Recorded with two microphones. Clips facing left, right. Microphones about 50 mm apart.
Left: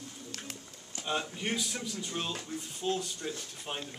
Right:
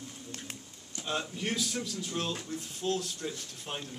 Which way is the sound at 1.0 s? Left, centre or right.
Centre.